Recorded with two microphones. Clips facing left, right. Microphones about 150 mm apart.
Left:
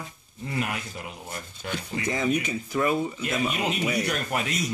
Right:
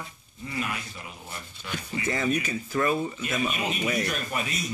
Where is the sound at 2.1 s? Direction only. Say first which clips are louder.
Left 1 dB; 15° left (ahead or behind).